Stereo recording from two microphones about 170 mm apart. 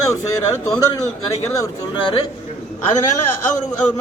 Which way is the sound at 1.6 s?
30° left (ahead or behind).